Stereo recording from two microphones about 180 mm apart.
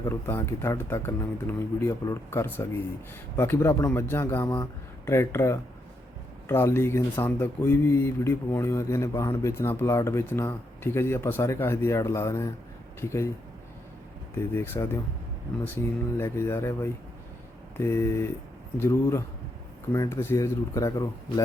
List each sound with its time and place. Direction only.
0.0 s speech: 15° left (ahead or behind)
14.5 s speech: 15° left (ahead or behind)